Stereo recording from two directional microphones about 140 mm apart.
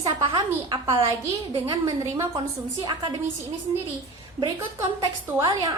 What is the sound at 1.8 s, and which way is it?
Speech, 20° right (ahead or behind).